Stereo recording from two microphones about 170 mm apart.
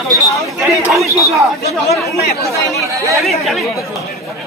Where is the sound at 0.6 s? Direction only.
Centre (ahead or behind).